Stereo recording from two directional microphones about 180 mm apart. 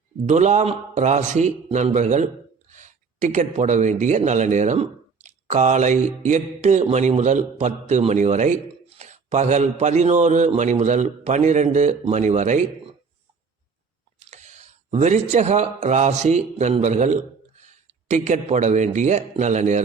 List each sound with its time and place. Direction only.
0.3 s a man's voice: 40° right (ahead or behind)
14.2 s speech: 40° right (ahead or behind)